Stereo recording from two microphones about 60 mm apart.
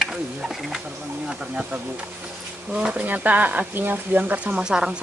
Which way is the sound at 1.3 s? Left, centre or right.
Centre.